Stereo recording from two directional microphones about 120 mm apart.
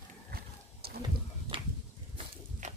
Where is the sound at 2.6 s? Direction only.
85° right.